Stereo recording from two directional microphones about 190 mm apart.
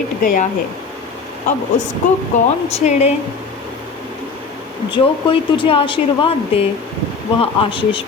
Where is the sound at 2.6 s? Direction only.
35° left (ahead or behind).